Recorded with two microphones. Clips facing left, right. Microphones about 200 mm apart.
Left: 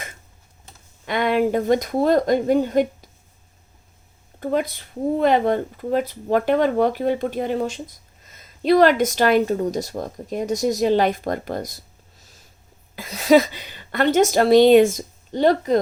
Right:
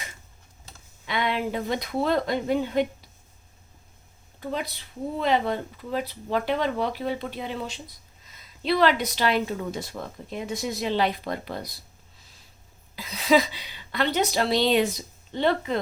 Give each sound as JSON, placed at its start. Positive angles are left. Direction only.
{"t": 1.0, "sound": "speech", "side_deg": 45}
{"t": 4.4, "sound": "speech", "side_deg": 50}
{"t": 13.0, "sound": "speech", "side_deg": 45}